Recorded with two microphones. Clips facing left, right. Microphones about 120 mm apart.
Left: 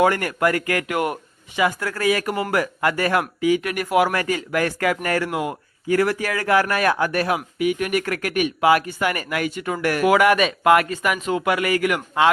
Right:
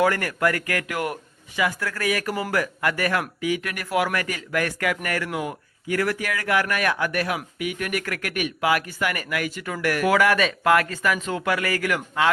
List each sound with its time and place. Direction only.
0.0 s speech: 25° left (ahead or behind)